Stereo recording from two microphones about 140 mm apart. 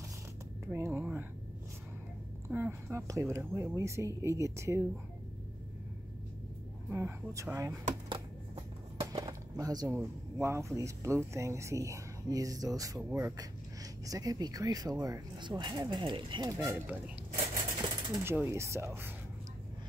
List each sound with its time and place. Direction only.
0.7 s a sound: 15° right (ahead or behind)
2.4 s speech: 15° right (ahead or behind)
6.9 s speech: 20° right (ahead or behind)
9.0 s speech: 25° right (ahead or behind)
17.7 s coin: 30° right (ahead or behind)
18.2 s speech: 15° right (ahead or behind)